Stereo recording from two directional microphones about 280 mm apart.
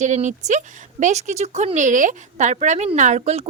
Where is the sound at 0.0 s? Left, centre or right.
Right.